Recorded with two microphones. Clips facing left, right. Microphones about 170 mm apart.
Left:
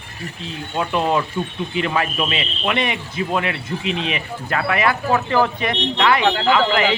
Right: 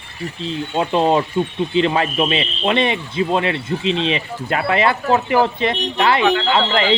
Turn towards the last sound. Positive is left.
turn(degrees=-30)  # may be behind; listen again after turning